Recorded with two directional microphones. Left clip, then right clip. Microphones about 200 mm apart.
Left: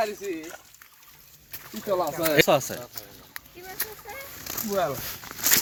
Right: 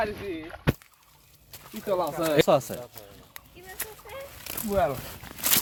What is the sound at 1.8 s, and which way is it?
Speech, 5° right (ahead or behind).